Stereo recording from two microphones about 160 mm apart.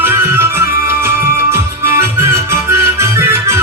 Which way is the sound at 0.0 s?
15° right (ahead or behind).